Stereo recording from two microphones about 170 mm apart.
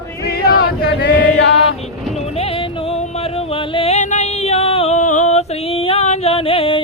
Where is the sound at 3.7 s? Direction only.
40° left (ahead or behind).